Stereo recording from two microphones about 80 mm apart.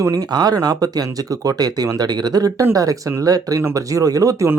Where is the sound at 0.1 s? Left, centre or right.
Right.